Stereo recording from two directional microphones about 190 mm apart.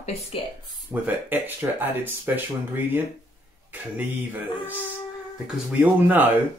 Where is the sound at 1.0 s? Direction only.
10° right (ahead or behind).